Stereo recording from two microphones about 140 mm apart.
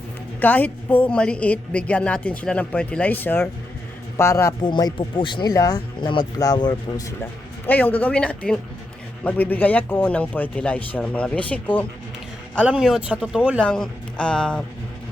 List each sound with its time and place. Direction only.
0.3 s a woman's voice: 10° left (ahead or behind)
4.6 s speech: 30° left (ahead or behind)
7.7 s a woman's voice: 10° left (ahead or behind)
12.6 s a man's voice: 5° right (ahead or behind)
13.6 s a woman's voice: 5° left (ahead or behind)